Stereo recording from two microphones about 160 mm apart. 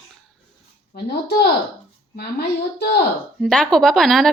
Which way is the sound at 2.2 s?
80° left.